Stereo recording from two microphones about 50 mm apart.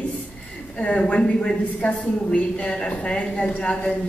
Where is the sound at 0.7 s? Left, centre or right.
Left.